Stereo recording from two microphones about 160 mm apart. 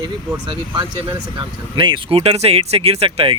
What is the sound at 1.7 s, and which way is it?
Speech, 30° right (ahead or behind).